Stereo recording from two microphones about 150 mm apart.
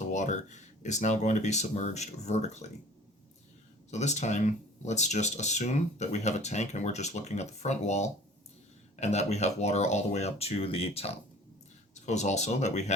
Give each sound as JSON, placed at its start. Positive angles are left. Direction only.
{"t": 0.1, "sound": "speech", "side_deg": 50}
{"t": 3.9, "sound": "speech", "side_deg": 50}